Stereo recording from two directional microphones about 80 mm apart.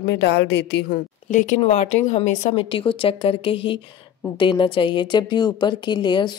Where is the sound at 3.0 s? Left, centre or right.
Left.